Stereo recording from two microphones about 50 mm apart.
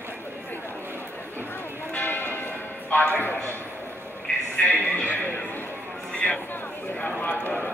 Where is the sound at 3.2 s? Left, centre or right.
Left.